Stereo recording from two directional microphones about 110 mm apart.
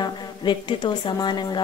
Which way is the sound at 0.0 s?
45° left (ahead or behind).